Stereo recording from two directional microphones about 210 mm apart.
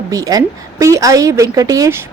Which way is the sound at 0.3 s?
15° right (ahead or behind).